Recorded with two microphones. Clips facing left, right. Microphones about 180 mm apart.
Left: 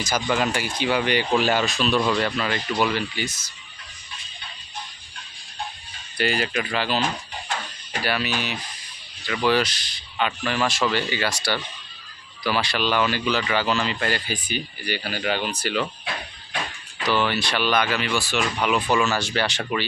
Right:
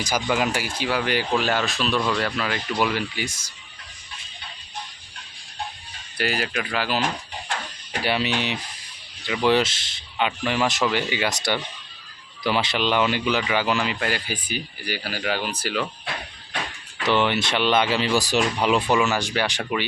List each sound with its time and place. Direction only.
0.0 s speech: 10° right (ahead or behind)
6.1 s speech: 5° right (ahead or behind)
8.0 s a man's voice: 25° right (ahead or behind); by 15.9 s 5° right (ahead or behind)
17.0 s a man's voice: 20° right (ahead or behind)
18.9 s speech: 15° right (ahead or behind)